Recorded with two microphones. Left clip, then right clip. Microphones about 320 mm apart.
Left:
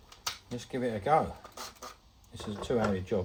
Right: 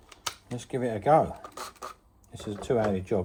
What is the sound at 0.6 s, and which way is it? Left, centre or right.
Speech, right.